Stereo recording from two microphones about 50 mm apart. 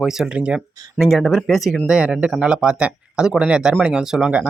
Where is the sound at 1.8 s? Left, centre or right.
Centre.